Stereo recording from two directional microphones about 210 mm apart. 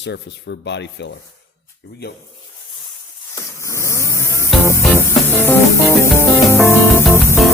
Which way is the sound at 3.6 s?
15° left (ahead or behind).